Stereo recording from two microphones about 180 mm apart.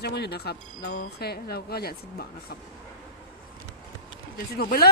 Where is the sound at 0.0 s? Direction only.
65° left (ahead or behind).